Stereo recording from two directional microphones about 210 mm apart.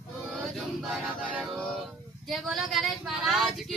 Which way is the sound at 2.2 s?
Centre (ahead or behind).